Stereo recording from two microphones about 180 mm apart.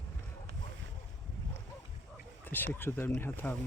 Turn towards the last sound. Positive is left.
turn(degrees=10)  # may be behind; listen again after turning